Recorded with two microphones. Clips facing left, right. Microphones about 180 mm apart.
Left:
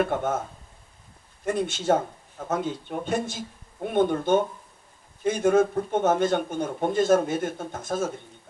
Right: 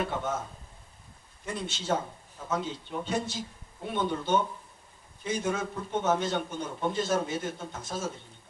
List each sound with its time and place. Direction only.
0.0 s speech: 55° left (ahead or behind)
1.5 s speech: 50° left (ahead or behind)